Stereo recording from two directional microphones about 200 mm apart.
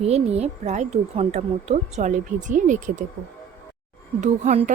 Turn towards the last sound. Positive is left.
turn(degrees=-35)  # may be behind; listen again after turning